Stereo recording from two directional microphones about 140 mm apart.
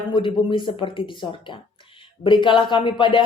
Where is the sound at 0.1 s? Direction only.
35° left (ahead or behind).